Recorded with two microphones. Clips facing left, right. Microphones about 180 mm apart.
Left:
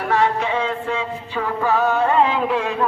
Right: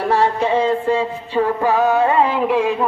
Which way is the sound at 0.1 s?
35° right (ahead or behind).